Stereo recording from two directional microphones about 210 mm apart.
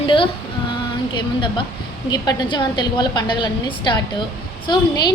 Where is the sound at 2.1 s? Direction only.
20° left (ahead or behind).